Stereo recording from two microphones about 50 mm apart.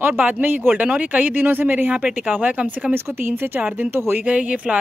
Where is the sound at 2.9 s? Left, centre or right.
Right.